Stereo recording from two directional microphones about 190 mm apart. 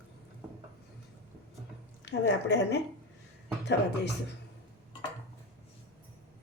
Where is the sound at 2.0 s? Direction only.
65° left (ahead or behind).